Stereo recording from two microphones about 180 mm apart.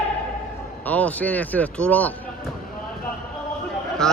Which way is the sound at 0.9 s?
10° left (ahead or behind).